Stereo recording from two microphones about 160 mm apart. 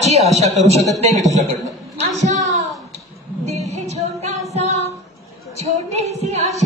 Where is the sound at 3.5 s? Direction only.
45° right (ahead or behind).